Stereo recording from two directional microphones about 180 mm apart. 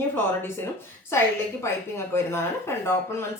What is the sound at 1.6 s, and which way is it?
Speech, 15° left (ahead or behind).